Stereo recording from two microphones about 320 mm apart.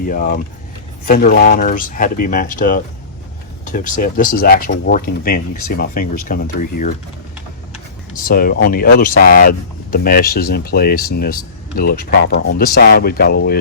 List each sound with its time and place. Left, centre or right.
0.0 s speech: left
8.1 s speech: left